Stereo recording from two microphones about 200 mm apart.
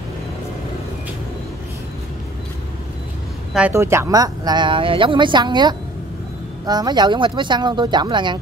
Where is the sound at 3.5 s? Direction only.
10° right (ahead or behind).